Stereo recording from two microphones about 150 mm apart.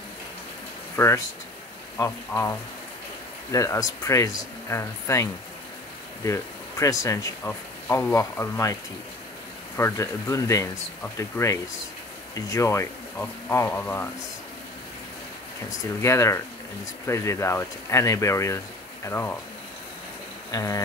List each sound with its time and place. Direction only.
0.9 s speech: 20° left (ahead or behind)
3.5 s speech: 20° left (ahead or behind)
9.8 s speech: 15° left (ahead or behind)
16.0 s speech: 20° left (ahead or behind)
20.5 s speech: 25° left (ahead or behind)